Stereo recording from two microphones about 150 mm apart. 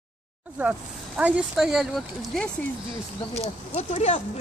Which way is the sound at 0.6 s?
10° right (ahead or behind).